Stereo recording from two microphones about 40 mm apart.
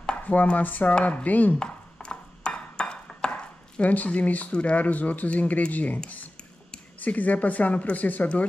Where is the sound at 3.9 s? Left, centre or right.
Left.